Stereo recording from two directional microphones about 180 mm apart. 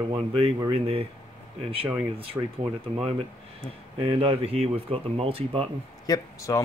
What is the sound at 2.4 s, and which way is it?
Speech, 15° right (ahead or behind).